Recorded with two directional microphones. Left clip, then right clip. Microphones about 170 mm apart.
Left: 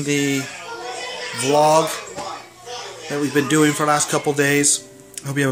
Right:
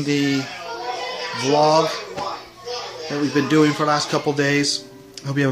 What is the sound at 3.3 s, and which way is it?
Speech, 15° left (ahead or behind).